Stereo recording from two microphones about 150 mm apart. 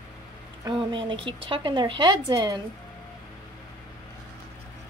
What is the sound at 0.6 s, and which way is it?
Speech, 35° right (ahead or behind).